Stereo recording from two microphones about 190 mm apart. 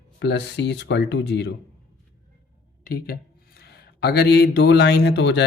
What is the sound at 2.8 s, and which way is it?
Speech, 50° left (ahead or behind).